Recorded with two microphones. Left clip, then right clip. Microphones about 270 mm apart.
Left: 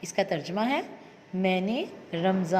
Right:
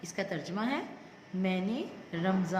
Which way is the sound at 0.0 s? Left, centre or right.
Centre.